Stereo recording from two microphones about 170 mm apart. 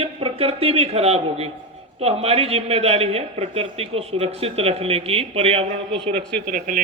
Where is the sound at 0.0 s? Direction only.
35° right (ahead or behind).